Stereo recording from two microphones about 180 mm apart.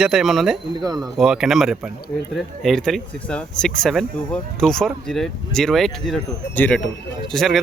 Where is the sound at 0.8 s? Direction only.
20° right (ahead or behind).